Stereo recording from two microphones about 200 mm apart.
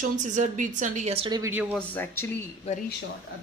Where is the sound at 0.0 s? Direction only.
40° right (ahead or behind).